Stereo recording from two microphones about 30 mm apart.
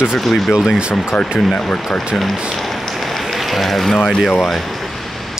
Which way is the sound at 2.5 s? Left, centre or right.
Centre.